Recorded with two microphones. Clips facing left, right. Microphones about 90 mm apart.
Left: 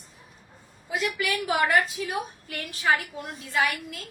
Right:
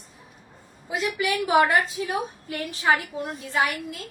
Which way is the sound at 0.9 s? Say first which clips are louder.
Right 2 dB; 25° right (ahead or behind).